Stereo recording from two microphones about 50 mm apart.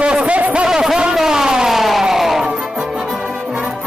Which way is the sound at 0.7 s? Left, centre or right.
Centre.